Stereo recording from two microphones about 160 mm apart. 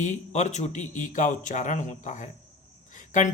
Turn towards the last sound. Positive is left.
turn(degrees=50)  # may be behind; listen again after turning